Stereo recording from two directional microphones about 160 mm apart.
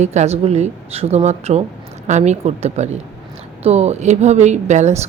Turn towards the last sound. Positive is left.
turn(degrees=-45)  # may be behind; listen again after turning